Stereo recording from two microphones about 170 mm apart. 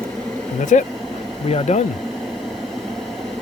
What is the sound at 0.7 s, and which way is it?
Speech, 45° left (ahead or behind).